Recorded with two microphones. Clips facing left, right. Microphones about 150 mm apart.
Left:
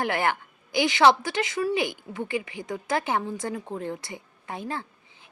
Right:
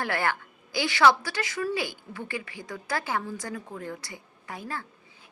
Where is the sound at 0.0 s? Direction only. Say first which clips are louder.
Left 3 dB; 20° left (ahead or behind).